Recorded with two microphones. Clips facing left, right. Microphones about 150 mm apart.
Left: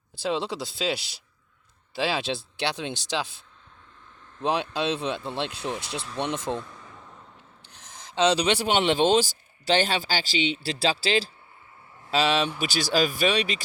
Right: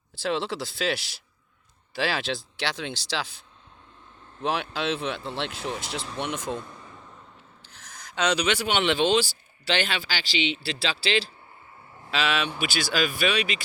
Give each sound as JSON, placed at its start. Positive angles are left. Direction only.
{"t": 0.2, "sound": "speech", "side_deg": 15}
{"t": 4.4, "sound": "speech", "side_deg": 20}
{"t": 6.7, "sound": "a sound", "side_deg": -10}
{"t": 7.7, "sound": "speech", "side_deg": 20}